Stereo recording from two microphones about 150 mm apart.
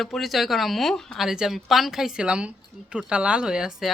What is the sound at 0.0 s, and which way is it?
Speech, centre (ahead or behind).